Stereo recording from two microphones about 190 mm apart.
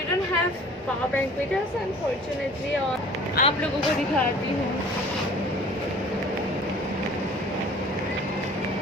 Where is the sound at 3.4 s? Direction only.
50° left (ahead or behind).